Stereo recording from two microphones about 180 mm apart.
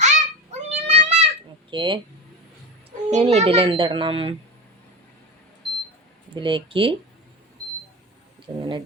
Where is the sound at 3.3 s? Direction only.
35° right (ahead or behind).